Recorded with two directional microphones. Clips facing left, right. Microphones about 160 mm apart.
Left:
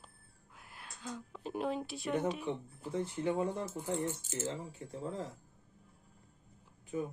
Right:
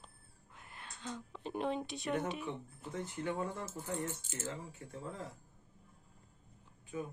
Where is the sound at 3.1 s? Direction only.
20° left (ahead or behind).